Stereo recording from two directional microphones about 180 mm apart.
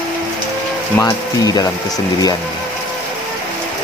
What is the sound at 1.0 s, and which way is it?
Speech, 20° left (ahead or behind).